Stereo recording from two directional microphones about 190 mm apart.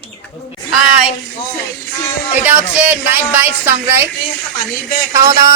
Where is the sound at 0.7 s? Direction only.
5° right (ahead or behind).